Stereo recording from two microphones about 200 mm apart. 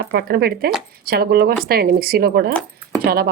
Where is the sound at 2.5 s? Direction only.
5° left (ahead or behind).